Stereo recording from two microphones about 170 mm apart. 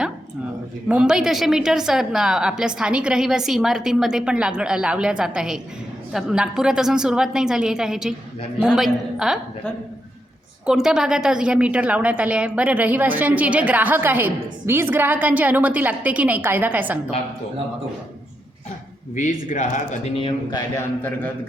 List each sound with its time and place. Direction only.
0.9 s a woman's voice: 5° right (ahead or behind)
10.7 s a woman's voice: 5° right (ahead or behind)
19.1 s speech: 50° left (ahead or behind)
20.5 s a man's voice: 15° left (ahead or behind)